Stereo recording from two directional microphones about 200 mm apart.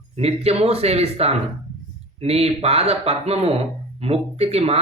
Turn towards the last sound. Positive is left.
turn(degrees=-30)  # may be behind; listen again after turning